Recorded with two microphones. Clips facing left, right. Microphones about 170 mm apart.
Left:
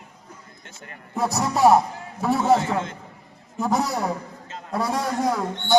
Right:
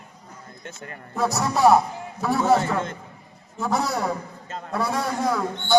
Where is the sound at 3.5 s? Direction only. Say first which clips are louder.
Left 1 dB; 15° left (ahead or behind).